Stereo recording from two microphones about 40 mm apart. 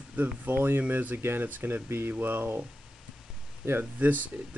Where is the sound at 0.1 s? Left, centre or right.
Right.